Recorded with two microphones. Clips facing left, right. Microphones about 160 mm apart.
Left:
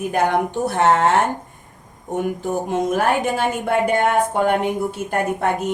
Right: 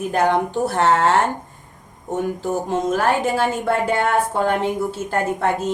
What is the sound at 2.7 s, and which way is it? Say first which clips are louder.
A woman's voice: even; 15° left (ahead or behind).